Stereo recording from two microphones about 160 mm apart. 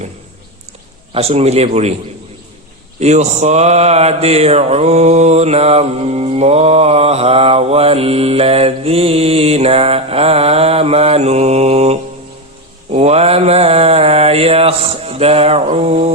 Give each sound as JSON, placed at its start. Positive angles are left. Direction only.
{"t": 1.1, "sound": "mantra", "side_deg": -40}
{"t": 3.0, "sound": "mantra", "side_deg": -45}